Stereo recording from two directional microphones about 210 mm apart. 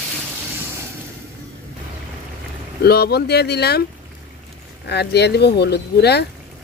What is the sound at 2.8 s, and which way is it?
Speech, 50° left (ahead or behind).